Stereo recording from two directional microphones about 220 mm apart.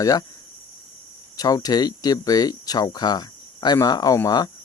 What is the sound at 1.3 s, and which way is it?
Speech, 15° left (ahead or behind).